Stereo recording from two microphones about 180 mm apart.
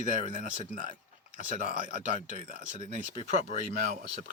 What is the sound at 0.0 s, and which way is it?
Speech, 45° right (ahead or behind).